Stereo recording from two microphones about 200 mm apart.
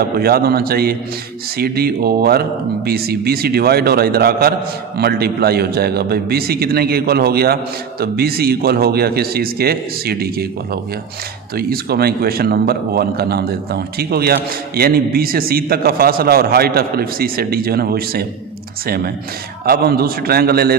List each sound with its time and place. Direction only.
0.2 s a man's voice: 50° right (ahead or behind)